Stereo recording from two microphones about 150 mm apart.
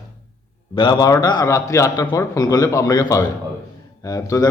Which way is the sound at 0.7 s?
30° left (ahead or behind).